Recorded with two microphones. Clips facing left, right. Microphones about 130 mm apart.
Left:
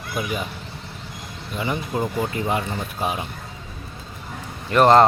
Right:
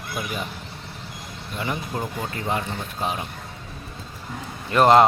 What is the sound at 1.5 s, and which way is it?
Speech, centre (ahead or behind).